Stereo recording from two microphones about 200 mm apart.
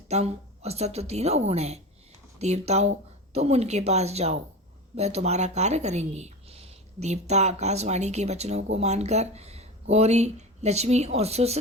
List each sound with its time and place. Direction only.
0.1 s speech: 35° right (ahead or behind)